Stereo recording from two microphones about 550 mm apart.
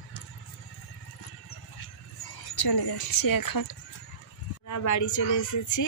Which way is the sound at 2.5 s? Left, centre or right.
Left.